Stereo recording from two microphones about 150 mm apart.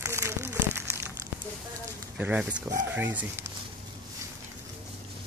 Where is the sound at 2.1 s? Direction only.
10° right (ahead or behind).